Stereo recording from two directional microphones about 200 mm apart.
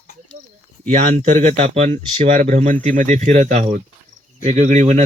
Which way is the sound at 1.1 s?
35° right (ahead or behind).